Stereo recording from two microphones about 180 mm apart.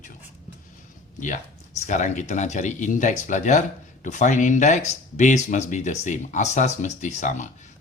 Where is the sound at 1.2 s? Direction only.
45° left (ahead or behind).